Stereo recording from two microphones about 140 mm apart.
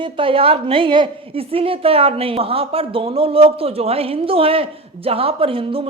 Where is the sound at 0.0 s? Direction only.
40° right (ahead or behind).